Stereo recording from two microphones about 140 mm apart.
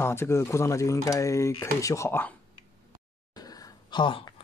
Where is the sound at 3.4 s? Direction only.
25° left (ahead or behind).